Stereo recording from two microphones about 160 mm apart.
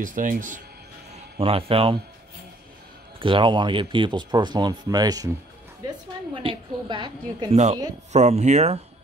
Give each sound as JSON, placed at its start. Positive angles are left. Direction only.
{"t": 0.0, "sound": "speech", "side_deg": -55}
{"t": 1.1, "sound": "speech", "side_deg": -35}
{"t": 3.2, "sound": "speech", "side_deg": -30}
{"t": 6.4, "sound": "speech", "side_deg": -30}
{"t": 8.1, "sound": "speech", "side_deg": -45}